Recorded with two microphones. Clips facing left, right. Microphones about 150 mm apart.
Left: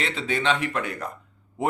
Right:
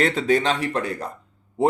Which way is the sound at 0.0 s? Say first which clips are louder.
Right 7 dB; 45° right (ahead or behind).